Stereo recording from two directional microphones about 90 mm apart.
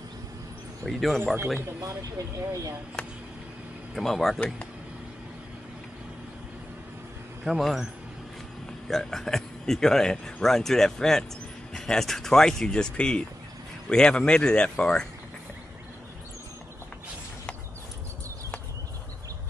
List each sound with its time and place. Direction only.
0.8 s speech: centre (ahead or behind)
1.2 s speech: 20° right (ahead or behind)
1.8 s speech: 35° right (ahead or behind)
3.9 s speech: 5° left (ahead or behind)
7.4 s speech: centre (ahead or behind)